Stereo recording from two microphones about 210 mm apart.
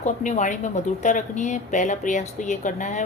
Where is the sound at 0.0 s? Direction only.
35° left (ahead or behind).